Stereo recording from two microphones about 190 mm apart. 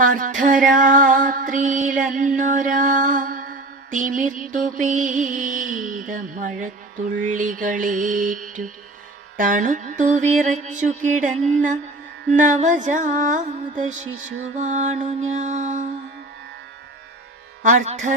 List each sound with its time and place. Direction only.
0.0 s music: 45° right (ahead or behind)
9.4 s mantra: 45° right (ahead or behind)
11.3 s music: centre (ahead or behind)
12.3 s mantra: 40° right (ahead or behind)
17.6 s mantra: 40° right (ahead or behind)